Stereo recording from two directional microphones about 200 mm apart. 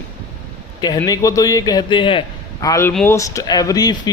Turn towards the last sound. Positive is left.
turn(degrees=20)  # may be behind; listen again after turning